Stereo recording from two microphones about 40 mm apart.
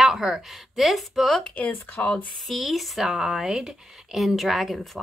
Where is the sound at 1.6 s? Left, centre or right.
Left.